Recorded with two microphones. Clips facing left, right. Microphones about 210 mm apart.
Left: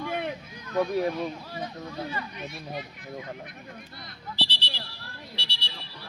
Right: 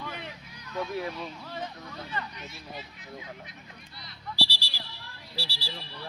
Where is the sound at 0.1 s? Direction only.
55° left (ahead or behind).